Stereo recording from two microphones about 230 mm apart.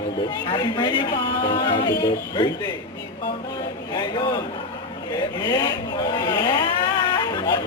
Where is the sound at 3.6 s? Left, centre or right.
Centre.